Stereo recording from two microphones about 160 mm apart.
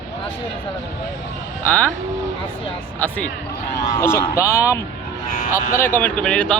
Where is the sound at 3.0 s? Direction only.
10° left (ahead or behind).